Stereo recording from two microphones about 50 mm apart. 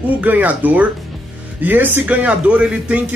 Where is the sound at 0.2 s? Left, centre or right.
Right.